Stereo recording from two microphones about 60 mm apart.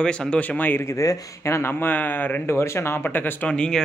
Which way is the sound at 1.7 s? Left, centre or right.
Left.